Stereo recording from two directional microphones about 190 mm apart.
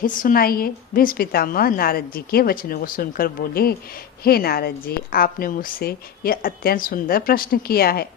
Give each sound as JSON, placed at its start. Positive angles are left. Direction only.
{"t": 0.0, "sound": "a woman's voice", "side_deg": 45}